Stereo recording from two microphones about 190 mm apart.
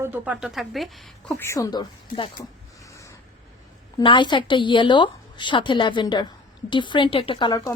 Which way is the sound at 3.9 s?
25° left (ahead or behind).